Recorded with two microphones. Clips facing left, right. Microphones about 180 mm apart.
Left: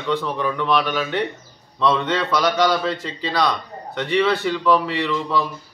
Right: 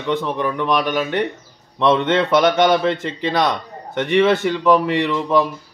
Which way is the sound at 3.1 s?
60° right (ahead or behind).